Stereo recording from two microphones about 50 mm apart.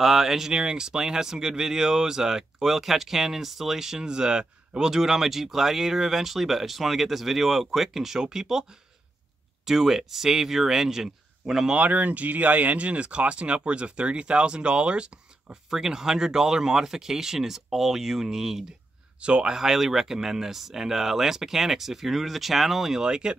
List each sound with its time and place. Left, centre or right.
0.0 s speech: centre
0.5 s speech: centre
9.7 s speech: centre
11.7 s speech: right; by 18.6 s centre
19.1 s speech: right
19.5 s speech: centre